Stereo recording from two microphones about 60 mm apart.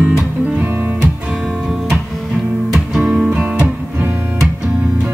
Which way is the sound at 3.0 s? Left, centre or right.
Centre.